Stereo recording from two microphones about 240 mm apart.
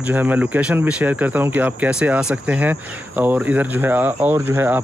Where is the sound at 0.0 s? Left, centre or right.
Centre.